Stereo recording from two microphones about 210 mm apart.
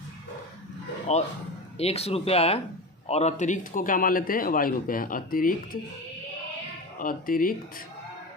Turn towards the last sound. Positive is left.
turn(degrees=40)  # may be behind; listen again after turning